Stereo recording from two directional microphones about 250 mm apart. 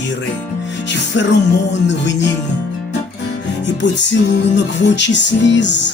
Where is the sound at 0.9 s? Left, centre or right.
Left.